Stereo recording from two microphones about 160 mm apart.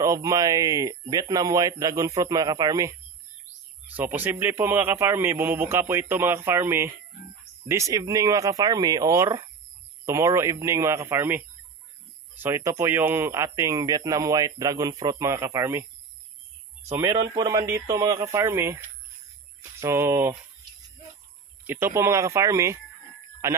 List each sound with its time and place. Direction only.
0.0 s speech: 20° right (ahead or behind)
17.0 s speech: 20° right (ahead or behind)
21.6 s speech: 15° right (ahead or behind)